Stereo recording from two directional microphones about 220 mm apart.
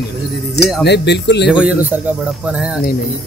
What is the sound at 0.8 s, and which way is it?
Speech, 50° left (ahead or behind).